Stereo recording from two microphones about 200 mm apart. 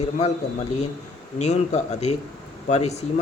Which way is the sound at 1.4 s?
35° left (ahead or behind).